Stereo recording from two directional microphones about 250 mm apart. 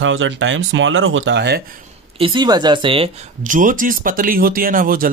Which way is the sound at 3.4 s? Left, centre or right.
Right.